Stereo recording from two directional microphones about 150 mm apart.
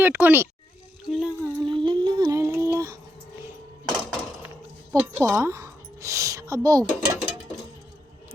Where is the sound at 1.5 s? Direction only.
35° right (ahead or behind).